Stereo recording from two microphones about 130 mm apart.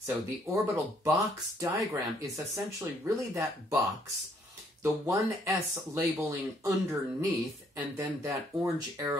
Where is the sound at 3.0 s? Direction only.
25° right (ahead or behind).